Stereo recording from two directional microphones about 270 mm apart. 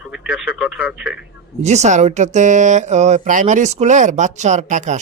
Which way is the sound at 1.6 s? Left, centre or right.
Right.